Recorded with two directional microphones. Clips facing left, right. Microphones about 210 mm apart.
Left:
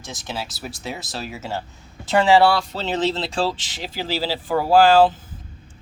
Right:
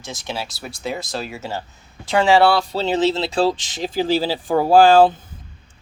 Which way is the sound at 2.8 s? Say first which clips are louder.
Right 5 dB; 10° right (ahead or behind).